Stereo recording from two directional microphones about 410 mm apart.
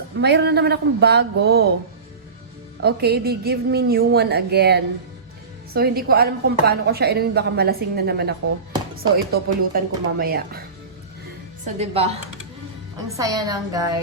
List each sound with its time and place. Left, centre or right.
0.2 s a woman's voice: right
2.8 s a woman's voice: right